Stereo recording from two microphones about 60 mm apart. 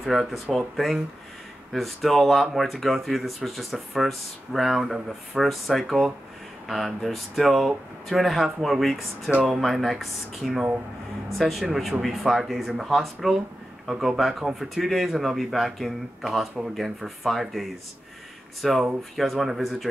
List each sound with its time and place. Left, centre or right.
0.0 s speech: centre